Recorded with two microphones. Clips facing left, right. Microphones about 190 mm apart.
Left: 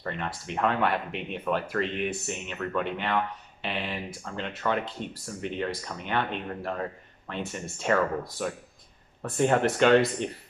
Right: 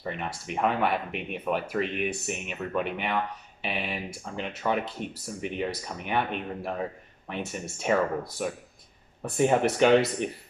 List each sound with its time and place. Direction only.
0.0 s speech: 10° right (ahead or behind)